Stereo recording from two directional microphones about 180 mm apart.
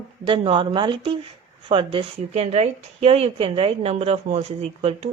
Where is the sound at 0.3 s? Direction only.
25° right (ahead or behind).